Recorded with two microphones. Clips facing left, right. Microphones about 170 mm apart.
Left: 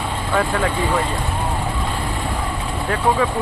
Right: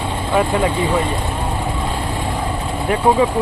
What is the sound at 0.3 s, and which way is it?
Speech, 15° right (ahead or behind).